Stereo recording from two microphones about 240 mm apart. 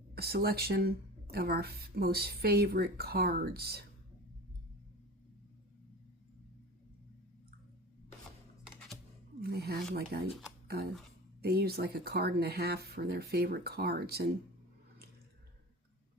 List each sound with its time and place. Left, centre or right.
0.1 s speech: right
9.4 s speech: right
11.4 s speech: right